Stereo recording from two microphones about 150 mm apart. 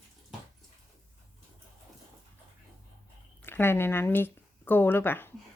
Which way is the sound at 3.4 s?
15° left (ahead or behind).